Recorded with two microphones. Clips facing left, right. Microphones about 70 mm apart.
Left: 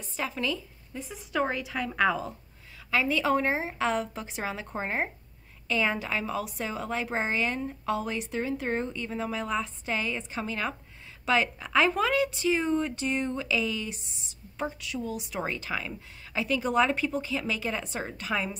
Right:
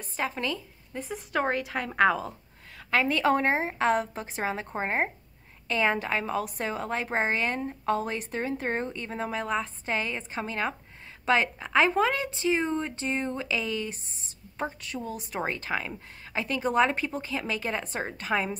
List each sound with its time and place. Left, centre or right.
0.0 s a woman's voice: right